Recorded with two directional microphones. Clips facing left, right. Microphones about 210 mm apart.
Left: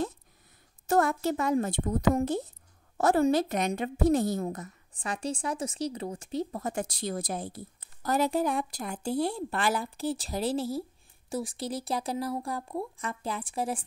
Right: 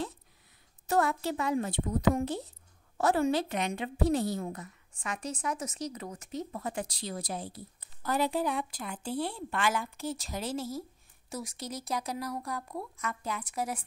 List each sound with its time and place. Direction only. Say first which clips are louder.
0.8 s a woman's voice: left 3 dB; 45° left (ahead or behind); by 13.8 s 30° left (ahead or behind)